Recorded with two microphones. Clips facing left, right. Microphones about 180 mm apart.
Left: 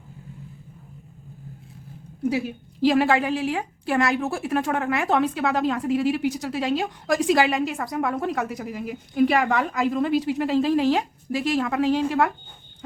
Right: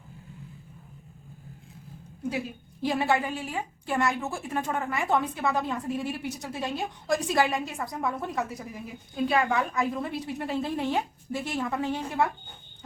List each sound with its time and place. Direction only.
2.8 s a woman's voice: 90° left